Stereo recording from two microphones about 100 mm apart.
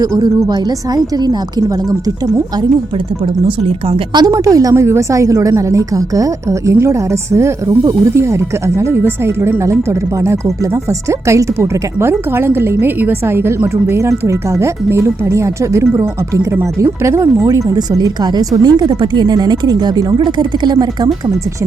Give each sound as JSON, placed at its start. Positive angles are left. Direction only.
{"t": 0.0, "sound": "a woman's voice", "side_deg": -35}
{"t": 3.4, "sound": "speech", "side_deg": -70}
{"t": 4.1, "sound": "a woman's voice", "side_deg": -40}